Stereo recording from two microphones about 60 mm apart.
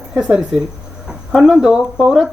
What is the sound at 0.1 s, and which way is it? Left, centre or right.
Speech, centre.